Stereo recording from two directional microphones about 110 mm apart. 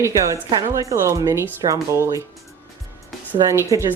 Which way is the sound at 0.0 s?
30° right (ahead or behind).